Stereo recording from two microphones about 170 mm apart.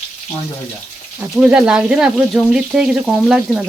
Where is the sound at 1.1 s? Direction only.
5° right (ahead or behind).